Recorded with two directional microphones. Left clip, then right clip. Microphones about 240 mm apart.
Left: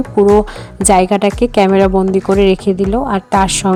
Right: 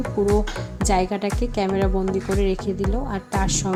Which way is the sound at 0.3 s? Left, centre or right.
Left.